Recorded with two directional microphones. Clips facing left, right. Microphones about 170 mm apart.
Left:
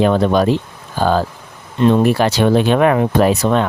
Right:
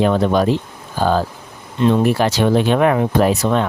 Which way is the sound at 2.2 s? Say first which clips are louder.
Left 2 dB; 70° left (ahead or behind).